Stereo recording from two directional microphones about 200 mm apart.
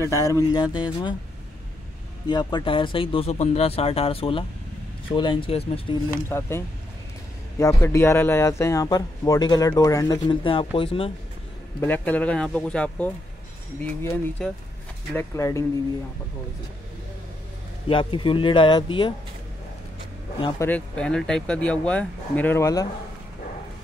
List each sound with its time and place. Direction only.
0.0 s speech: 15° left (ahead or behind)
2.2 s speech: 20° left (ahead or behind)
6.2 s speech: 10° left (ahead or behind)
11.8 s speech: 10° left (ahead or behind)
17.8 s speech: 25° left (ahead or behind)
20.3 s speech: 20° left (ahead or behind)
20.6 s speech: 5° left (ahead or behind)